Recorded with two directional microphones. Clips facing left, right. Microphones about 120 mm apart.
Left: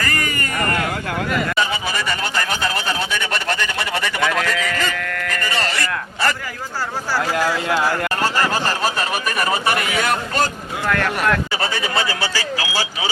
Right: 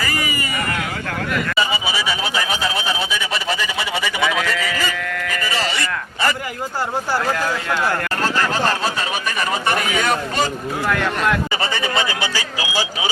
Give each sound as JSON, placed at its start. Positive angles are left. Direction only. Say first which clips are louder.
{"t": 0.0, "sound": "a sound", "louder": "even", "side_deg": -5}
{"t": 1.5, "sound": "speech", "louder": "even", "side_deg": -5}
{"t": 7.3, "sound": "speech", "louder": "left 3 dB", "side_deg": 20}
{"t": 8.2, "sound": "speech", "louder": "right 1 dB", "side_deg": 5}
{"t": 11.2, "sound": "speech", "louder": "even", "side_deg": 5}
{"t": 12.0, "sound": "speech", "louder": "left 1 dB", "side_deg": -15}